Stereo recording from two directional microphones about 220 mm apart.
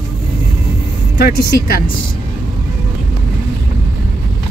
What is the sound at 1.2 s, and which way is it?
Speech, 45° left (ahead or behind).